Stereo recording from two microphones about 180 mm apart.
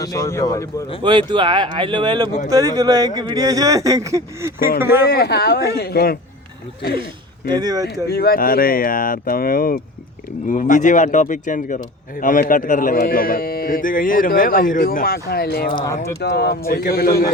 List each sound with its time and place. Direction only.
0.0 s speech: 20° left (ahead or behind)
1.3 s speech: 25° right (ahead or behind)
5.0 s speech: 60° left (ahead or behind)
7.4 s speech: 25° right (ahead or behind)
8.0 s speech: 60° left (ahead or behind)